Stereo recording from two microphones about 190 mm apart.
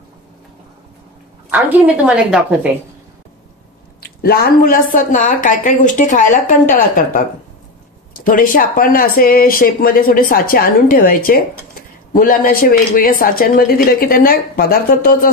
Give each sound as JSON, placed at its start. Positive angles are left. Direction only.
{"t": 1.5, "sound": "a woman's voice", "side_deg": -10}
{"t": 4.0, "sound": "speech", "side_deg": 55}